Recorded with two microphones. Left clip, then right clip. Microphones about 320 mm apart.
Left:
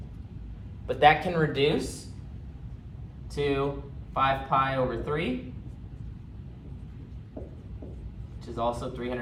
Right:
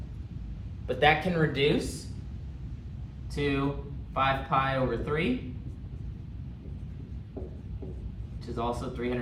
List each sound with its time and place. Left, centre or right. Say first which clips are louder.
0.9 s speech: left 3 dB; centre
3.3 s speech: left 2 dB; centre
8.5 s speech: left 3 dB; centre